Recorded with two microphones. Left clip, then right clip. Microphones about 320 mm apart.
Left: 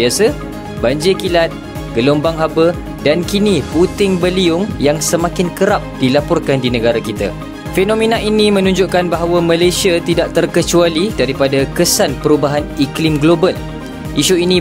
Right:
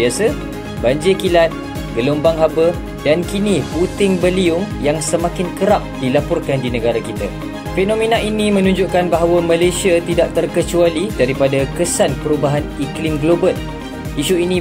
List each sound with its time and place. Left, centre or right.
0.2 s speech: left